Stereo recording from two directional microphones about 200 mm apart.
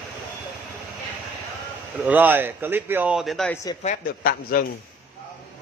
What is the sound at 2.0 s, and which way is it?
Speech, 10° right (ahead or behind).